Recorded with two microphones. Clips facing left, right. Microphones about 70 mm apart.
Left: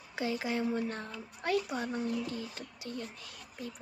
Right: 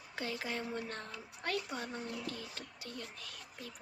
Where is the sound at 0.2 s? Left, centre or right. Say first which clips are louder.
Left 6 dB; centre.